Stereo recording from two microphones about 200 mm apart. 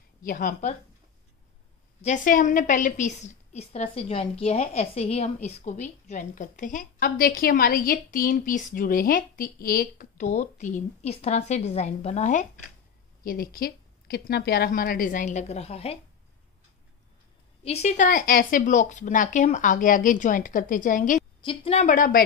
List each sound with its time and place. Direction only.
0.2 s a woman's voice: 40° left (ahead or behind)
2.0 s a woman's voice: 40° left (ahead or behind)
17.6 s a woman's voice: 35° left (ahead or behind)
21.4 s a woman's voice: 30° left (ahead or behind)